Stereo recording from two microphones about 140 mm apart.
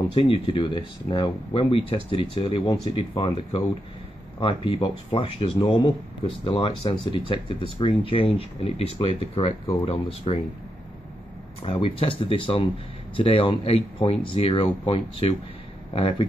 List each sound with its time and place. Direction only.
0.1 s speech: 40° left (ahead or behind)
11.6 s speech: 40° left (ahead or behind)